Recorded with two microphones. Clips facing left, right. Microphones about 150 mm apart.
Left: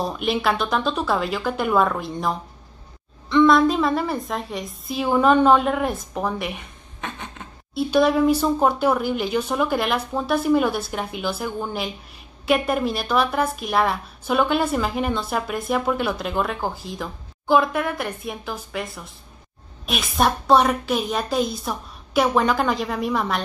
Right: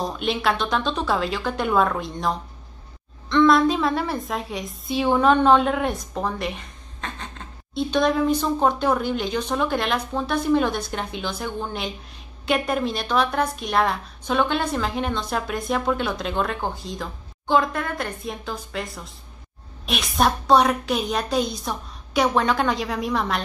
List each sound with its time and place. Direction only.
0.0 s a woman's voice: 5° left (ahead or behind)
19.9 s a woman's voice: centre (ahead or behind)